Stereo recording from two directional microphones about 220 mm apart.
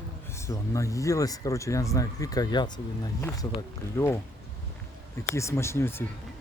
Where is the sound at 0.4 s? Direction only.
15° left (ahead or behind).